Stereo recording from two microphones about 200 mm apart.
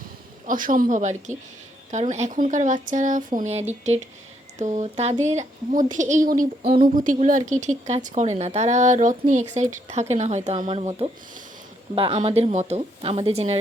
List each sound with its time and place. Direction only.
0.4 s speech: 40° right (ahead or behind)